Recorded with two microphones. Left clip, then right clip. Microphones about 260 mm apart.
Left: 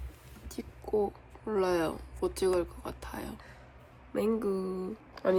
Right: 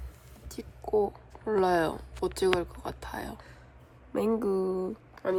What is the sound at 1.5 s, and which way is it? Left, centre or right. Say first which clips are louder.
Speech: right 4 dB; centre.